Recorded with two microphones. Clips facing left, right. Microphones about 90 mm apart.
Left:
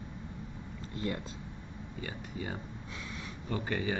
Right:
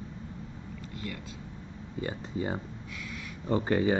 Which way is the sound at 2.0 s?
30° right (ahead or behind).